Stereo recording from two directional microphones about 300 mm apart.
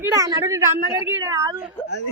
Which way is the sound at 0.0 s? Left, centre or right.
Centre.